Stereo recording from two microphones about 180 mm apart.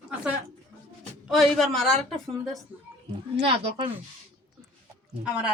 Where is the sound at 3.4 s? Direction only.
30° right (ahead or behind).